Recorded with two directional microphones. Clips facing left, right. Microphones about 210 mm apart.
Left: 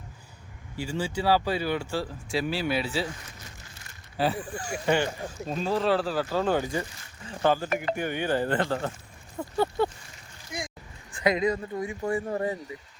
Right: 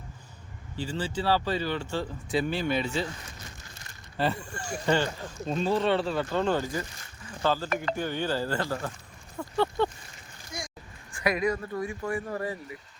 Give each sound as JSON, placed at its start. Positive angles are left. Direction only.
{"t": 0.8, "sound": "speech", "side_deg": 10}
{"t": 4.2, "sound": "speech", "side_deg": 5}
{"t": 9.6, "sound": "speech", "side_deg": 10}
{"t": 11.1, "sound": "speech", "side_deg": 20}